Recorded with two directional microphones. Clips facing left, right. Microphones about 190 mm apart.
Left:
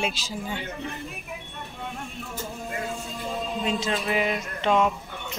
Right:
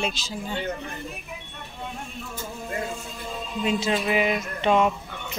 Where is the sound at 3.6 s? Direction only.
10° right (ahead or behind).